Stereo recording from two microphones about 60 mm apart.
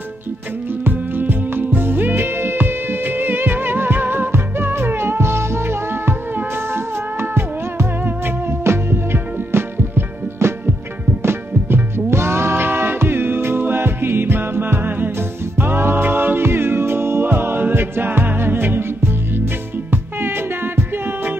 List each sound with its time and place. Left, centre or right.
0.8 s music: right
19.9 s music: right